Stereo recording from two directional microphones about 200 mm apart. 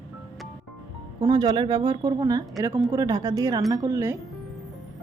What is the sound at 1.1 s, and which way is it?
Speech, 20° right (ahead or behind).